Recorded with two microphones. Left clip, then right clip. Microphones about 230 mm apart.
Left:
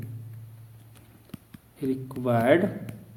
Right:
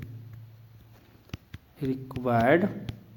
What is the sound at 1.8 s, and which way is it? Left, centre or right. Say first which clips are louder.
Speech: left 2 dB; right.